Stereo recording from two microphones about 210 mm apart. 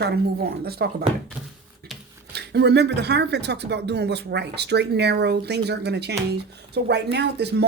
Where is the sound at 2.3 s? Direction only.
50° right (ahead or behind).